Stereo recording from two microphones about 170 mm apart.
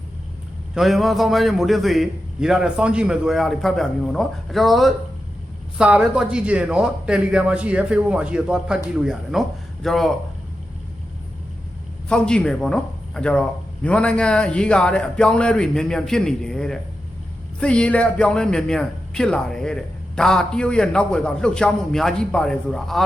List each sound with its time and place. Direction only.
0.7 s a man's voice: centre (ahead or behind)
12.0 s a man's voice: 5° left (ahead or behind)